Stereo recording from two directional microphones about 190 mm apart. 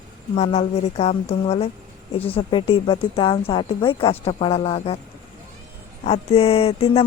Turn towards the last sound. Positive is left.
turn(degrees=30)  # may be behind; listen again after turning